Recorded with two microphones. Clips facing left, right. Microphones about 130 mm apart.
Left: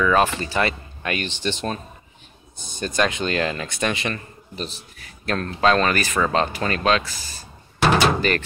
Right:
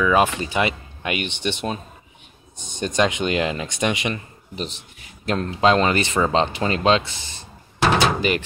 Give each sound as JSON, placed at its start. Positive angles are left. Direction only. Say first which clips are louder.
{"t": 0.0, "sound": "speech", "louder": "right 1 dB", "side_deg": -15}